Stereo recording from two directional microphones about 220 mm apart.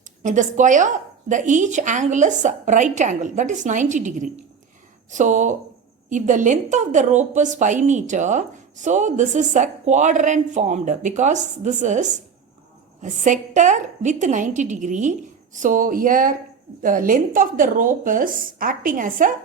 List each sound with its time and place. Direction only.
0.2 s a woman's voice: 35° right (ahead or behind)